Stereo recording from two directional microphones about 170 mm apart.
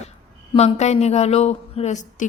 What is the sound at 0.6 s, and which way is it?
Speech, 40° left (ahead or behind).